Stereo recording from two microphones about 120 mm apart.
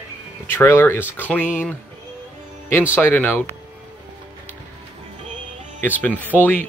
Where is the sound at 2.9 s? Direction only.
15° left (ahead or behind).